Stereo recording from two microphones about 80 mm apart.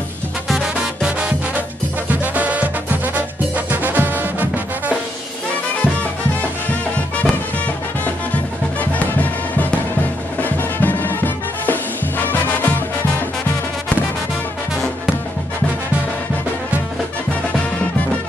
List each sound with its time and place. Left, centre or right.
0.5 s music: centre
2.0 s music: centre
7.2 s music: centre
10.4 s music: left